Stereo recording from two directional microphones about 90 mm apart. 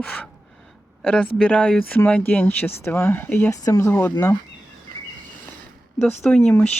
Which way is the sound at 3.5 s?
35° left (ahead or behind).